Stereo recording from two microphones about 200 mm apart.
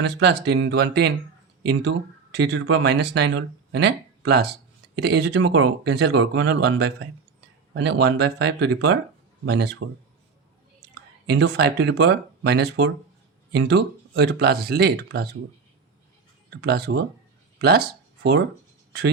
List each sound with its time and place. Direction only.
0.0 s speech: 60° right (ahead or behind)
11.3 s speech: 55° right (ahead or behind)
16.6 s speech: 55° right (ahead or behind)